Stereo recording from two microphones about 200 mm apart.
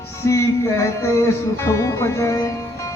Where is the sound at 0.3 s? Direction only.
15° left (ahead or behind).